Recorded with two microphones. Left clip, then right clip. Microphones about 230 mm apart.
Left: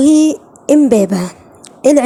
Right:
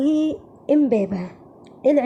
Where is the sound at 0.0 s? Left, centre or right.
Left.